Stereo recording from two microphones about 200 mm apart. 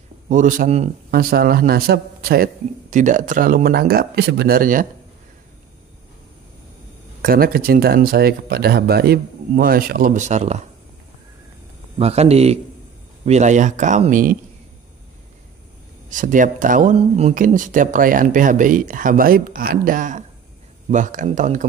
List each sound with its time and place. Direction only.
0.3 s speech: 40° right (ahead or behind)
1.1 s a man's voice: 50° right (ahead or behind)
7.2 s a man's voice: 45° right (ahead or behind)
12.0 s speech: 30° right (ahead or behind)
16.1 s speech: 40° right (ahead or behind)